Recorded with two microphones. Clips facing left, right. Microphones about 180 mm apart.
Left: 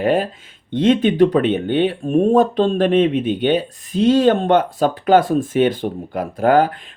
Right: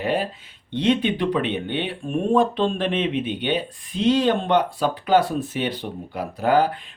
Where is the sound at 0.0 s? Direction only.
50° left (ahead or behind).